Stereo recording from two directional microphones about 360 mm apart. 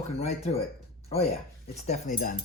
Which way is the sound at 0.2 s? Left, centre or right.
Centre.